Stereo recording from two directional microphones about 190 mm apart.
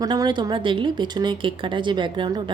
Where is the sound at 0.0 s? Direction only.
20° right (ahead or behind).